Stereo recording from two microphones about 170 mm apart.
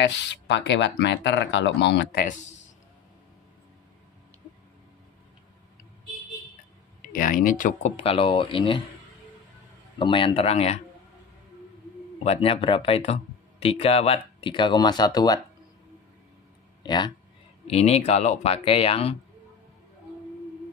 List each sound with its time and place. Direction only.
0.0 s speech: 90° left
7.1 s speech: 55° left (ahead or behind); by 8.8 s 30° left (ahead or behind)
9.9 s speech: 30° left (ahead or behind)
12.2 s speech: 35° left (ahead or behind)
16.8 s speech: 25° left (ahead or behind)
17.6 s speech: 35° left (ahead or behind)